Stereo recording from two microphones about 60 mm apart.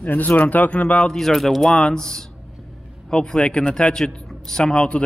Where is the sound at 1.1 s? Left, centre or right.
Centre.